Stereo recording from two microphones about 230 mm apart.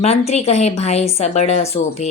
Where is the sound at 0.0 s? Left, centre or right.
Left.